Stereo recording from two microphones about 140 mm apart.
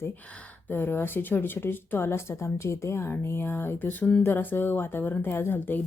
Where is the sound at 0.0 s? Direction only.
10° left (ahead or behind).